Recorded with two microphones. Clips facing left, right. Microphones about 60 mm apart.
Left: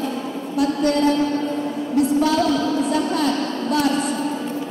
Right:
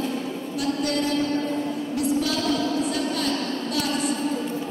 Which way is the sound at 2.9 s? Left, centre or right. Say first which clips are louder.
Left 6 dB; left.